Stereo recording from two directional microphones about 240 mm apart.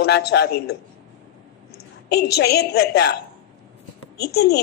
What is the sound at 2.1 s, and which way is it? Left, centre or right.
Speech, left.